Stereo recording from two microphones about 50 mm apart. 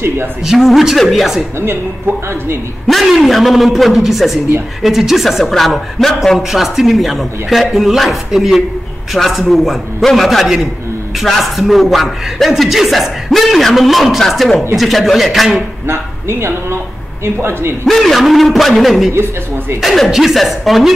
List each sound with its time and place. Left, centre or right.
0.5 s speech: centre
2.9 s speech: centre
15.9 s speech: right
17.8 s speech: centre